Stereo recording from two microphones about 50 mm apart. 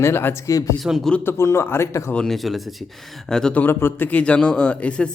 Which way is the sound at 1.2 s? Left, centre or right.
Left.